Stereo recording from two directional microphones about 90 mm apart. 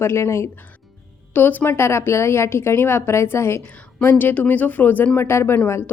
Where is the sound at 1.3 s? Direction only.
20° left (ahead or behind).